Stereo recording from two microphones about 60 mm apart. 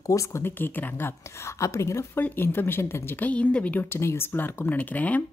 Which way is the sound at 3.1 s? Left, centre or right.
Left.